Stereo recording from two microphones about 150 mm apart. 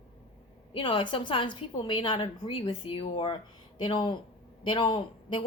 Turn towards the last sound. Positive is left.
turn(degrees=35)  # may be behind; listen again after turning